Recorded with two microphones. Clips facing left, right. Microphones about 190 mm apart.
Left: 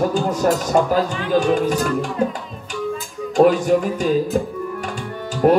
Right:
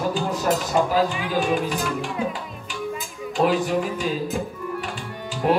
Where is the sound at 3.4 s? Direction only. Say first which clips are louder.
Left 7 dB; 45° left (ahead or behind).